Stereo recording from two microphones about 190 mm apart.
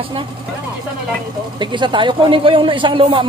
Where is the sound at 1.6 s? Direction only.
25° right (ahead or behind).